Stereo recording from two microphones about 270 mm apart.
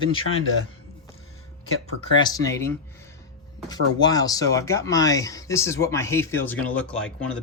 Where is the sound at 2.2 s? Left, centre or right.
Centre.